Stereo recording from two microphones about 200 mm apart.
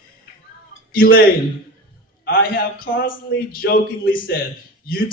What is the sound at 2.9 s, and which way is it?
Speech, 45° left (ahead or behind).